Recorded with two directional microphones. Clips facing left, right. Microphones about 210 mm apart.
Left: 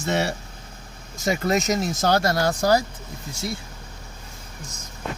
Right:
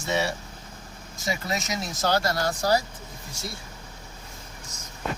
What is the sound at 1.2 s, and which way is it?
Speech, 50° left (ahead or behind).